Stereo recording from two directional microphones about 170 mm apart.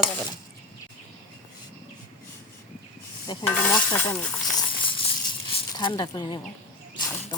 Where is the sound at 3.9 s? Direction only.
10° left (ahead or behind).